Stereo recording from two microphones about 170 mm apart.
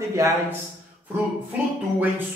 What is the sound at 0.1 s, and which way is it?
Speech, 15° right (ahead or behind).